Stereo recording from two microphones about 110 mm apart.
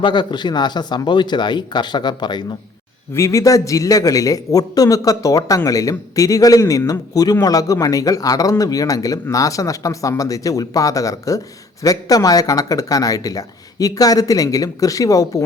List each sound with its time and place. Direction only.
0.0 s speech: 45° left (ahead or behind)
3.2 s a man's voice: 30° left (ahead or behind)